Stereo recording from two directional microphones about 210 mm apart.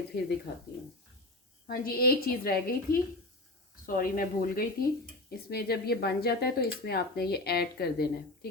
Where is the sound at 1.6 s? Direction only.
45° left (ahead or behind).